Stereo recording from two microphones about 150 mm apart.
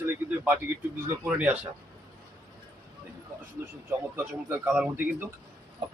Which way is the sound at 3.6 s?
15° right (ahead or behind).